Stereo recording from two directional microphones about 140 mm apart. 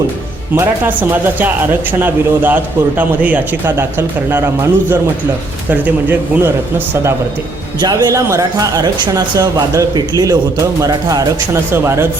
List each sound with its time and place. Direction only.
0.5 s speech: 15° right (ahead or behind)
7.8 s speech: 30° right (ahead or behind)